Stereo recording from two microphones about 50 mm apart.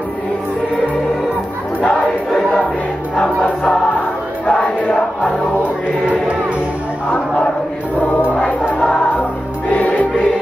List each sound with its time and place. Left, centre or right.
4.5 s music: left
5.6 s music: right
9.7 s music: left